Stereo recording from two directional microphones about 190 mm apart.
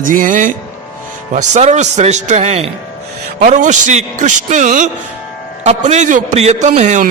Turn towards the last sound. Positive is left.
turn(degrees=-40)  # may be behind; listen again after turning